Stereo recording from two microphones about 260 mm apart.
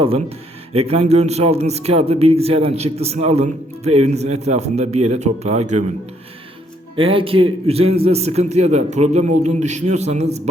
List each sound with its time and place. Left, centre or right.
0.7 s speech: right
6.9 s speech: centre